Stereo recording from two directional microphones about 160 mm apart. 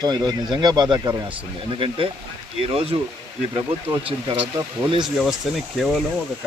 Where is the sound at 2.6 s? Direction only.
35° right (ahead or behind).